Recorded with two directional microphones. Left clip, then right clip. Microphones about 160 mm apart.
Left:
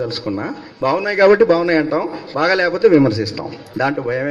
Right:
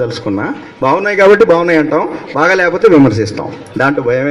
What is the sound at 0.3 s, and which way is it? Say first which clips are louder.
A man's voice: right 7 dB; 35° right (ahead or behind).